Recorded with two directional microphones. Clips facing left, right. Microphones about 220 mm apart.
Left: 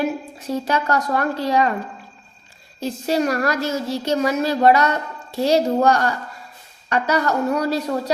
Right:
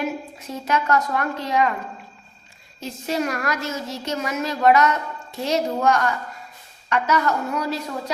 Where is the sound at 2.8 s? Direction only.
35° left (ahead or behind).